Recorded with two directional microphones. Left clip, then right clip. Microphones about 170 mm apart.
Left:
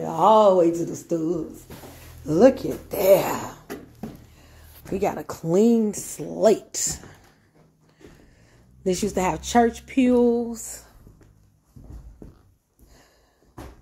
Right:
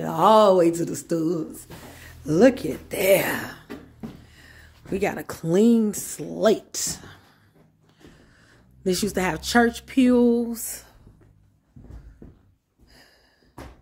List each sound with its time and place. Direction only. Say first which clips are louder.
0.0 s speech: even; 35° right (ahead or behind)
2.2 s speech: left 1 dB; 15° right (ahead or behind)
4.9 s speech: left 1 dB; 15° right (ahead or behind)
8.8 s speech: left 1 dB; 10° right (ahead or behind)